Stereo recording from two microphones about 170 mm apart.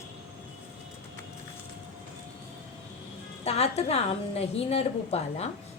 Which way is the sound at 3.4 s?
40° left (ahead or behind).